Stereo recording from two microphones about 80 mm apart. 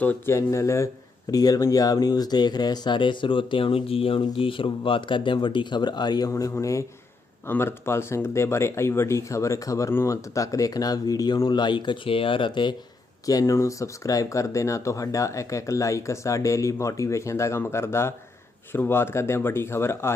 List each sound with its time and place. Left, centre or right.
0.3 s speech: left
1.3 s speech: left
6.3 s speech: left
7.4 s speech: left
13.4 s speech: left